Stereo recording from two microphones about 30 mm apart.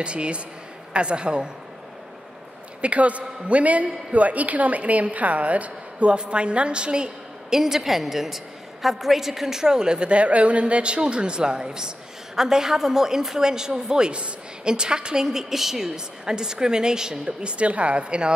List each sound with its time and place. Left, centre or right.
0.0 s a man's voice: right
2.8 s a man's voice: right
6.0 s a man's voice: right
7.4 s a woman's voice: centre
10.0 s a man's voice: right
15.2 s a woman's voice: centre
16.3 s a woman's voice: right
17.4 s a man's voice: right